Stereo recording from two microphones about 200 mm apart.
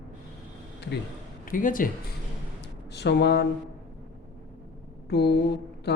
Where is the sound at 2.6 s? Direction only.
60° left (ahead or behind).